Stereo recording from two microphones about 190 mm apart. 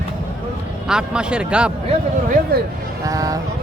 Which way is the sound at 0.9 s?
5° right (ahead or behind).